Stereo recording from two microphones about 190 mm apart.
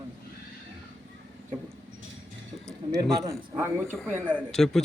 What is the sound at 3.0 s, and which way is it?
Speech, 15° right (ahead or behind).